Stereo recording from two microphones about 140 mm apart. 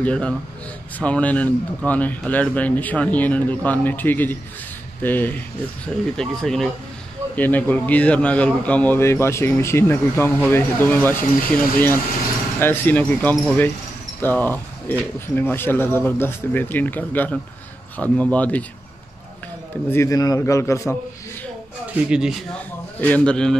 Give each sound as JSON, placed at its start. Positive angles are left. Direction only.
{"t": 0.0, "sound": "a man's voice", "side_deg": 10}
{"t": 6.1, "sound": "a man's voice", "side_deg": 5}
{"t": 19.9, "sound": "a man's voice", "side_deg": 20}
{"t": 21.9, "sound": "speech", "side_deg": -5}
{"t": 22.5, "sound": "a man's voice", "side_deg": 10}